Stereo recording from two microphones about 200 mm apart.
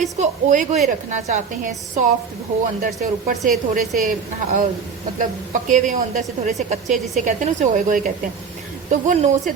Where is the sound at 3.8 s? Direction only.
45° right (ahead or behind).